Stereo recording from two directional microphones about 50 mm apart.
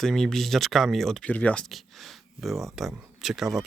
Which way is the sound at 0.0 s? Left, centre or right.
Centre.